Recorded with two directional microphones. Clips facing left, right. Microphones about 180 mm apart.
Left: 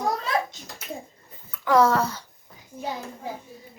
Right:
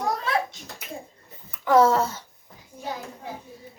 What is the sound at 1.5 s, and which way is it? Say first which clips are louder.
Speech: right 1 dB; 25° right (ahead or behind).